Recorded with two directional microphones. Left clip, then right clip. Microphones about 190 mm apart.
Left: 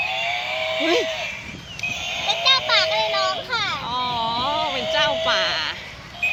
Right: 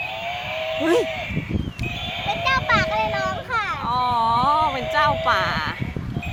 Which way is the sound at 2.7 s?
10° left (ahead or behind).